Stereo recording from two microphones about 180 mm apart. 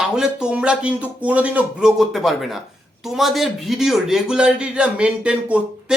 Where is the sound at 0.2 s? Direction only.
5° right (ahead or behind).